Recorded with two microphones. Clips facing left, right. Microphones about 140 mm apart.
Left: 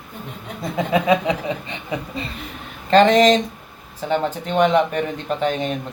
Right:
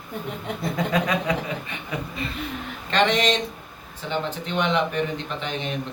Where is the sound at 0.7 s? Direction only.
25° left (ahead or behind).